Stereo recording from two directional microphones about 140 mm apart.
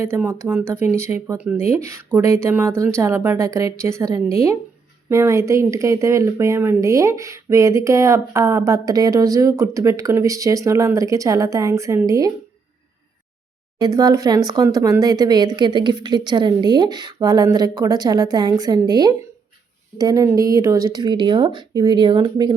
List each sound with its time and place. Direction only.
0.2 s speech: 15° right (ahead or behind)
13.7 s speech: 30° right (ahead or behind)